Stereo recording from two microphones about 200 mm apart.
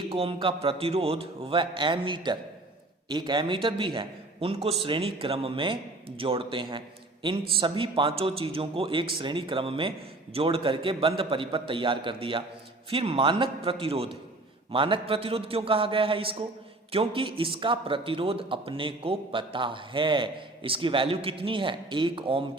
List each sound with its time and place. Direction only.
0.1 s speech: 25° right (ahead or behind)